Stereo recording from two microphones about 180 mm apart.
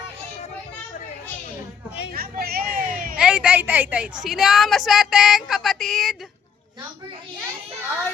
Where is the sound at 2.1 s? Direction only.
55° right (ahead or behind).